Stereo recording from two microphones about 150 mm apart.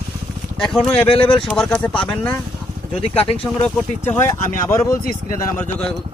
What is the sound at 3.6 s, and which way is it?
Speech, 15° left (ahead or behind).